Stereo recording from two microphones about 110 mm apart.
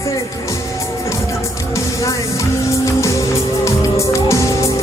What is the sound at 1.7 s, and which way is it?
Music, 30° left (ahead or behind).